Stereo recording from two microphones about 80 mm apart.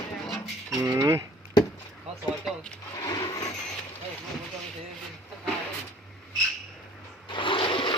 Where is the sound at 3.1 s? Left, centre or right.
Left.